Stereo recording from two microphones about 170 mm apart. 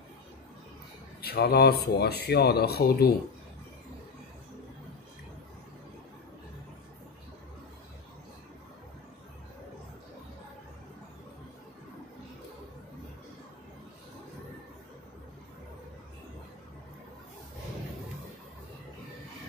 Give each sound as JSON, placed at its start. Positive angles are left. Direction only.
{"t": 1.2, "sound": "speech", "side_deg": 65}